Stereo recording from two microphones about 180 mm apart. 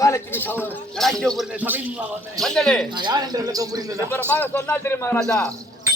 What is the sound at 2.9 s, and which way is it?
Speech, 25° right (ahead or behind).